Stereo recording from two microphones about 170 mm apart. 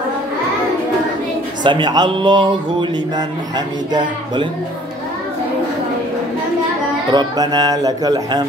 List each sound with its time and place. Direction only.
1.6 s speech: 25° right (ahead or behind)
7.1 s speech: 25° right (ahead or behind)